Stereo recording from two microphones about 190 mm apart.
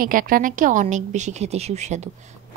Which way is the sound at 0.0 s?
50° right (ahead or behind).